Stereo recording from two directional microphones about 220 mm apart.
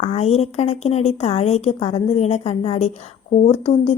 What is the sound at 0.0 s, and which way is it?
Speech, 30° left (ahead or behind).